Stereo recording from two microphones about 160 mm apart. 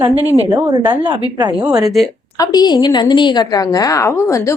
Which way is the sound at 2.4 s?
25° left (ahead or behind).